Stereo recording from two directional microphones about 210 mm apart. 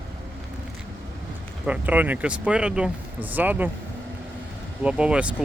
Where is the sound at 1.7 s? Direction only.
5° right (ahead or behind).